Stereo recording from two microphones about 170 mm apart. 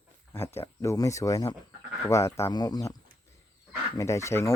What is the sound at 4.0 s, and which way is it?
Speech, 15° left (ahead or behind).